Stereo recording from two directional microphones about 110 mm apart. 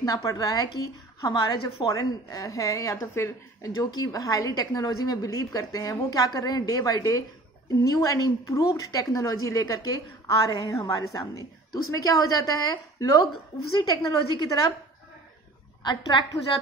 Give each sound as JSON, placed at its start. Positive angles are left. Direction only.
{"t": 0.0, "sound": "a woman's voice", "side_deg": 30}
{"t": 15.8, "sound": "a woman's voice", "side_deg": 45}